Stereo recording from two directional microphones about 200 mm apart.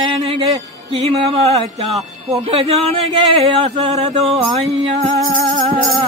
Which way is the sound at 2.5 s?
30° right (ahead or behind).